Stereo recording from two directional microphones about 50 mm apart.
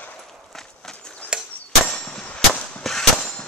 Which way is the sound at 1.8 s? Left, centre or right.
Centre.